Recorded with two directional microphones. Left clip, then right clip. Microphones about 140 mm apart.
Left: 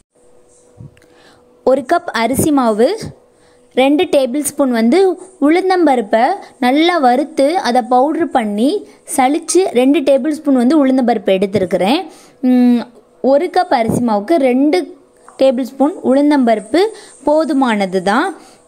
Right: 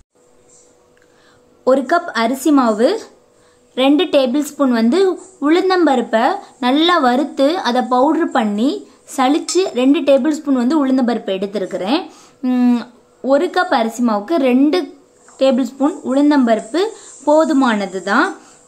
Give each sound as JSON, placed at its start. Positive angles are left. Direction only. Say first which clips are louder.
{"t": 1.6, "sound": "speech", "louder": "left 1 dB", "side_deg": 50}
{"t": 12.1, "sound": "speech", "louder": "left 5 dB", "side_deg": 25}
{"t": 12.8, "sound": "speech", "louder": "left 6 dB", "side_deg": 40}
{"t": 15.3, "sound": "speech", "louder": "left 2 dB", "side_deg": 50}
{"t": 15.8, "sound": "speech", "louder": "left 6 dB", "side_deg": 35}